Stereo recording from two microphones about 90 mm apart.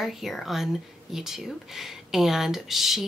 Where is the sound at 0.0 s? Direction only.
Centre (ahead or behind).